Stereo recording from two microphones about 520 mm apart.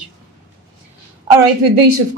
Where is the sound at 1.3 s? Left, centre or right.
Right.